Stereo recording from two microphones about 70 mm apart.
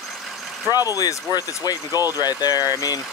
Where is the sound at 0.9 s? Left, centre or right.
Left.